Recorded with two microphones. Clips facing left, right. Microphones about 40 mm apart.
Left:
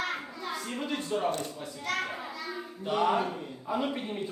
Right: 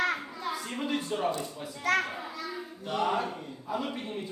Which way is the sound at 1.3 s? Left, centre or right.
Left.